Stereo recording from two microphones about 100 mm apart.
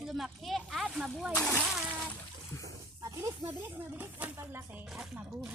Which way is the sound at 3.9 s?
20° right (ahead or behind).